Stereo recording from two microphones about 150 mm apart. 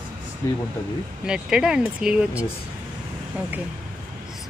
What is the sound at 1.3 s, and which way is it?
Speech, 5° right (ahead or behind).